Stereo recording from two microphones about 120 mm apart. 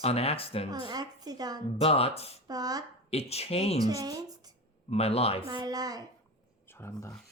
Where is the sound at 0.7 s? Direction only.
35° right (ahead or behind).